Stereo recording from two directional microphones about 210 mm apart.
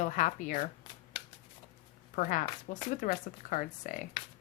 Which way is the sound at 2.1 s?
40° left (ahead or behind).